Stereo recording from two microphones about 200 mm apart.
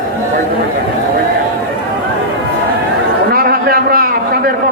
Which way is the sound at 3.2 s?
50° right (ahead or behind).